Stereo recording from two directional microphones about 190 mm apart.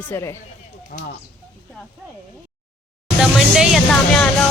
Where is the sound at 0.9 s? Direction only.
50° left (ahead or behind).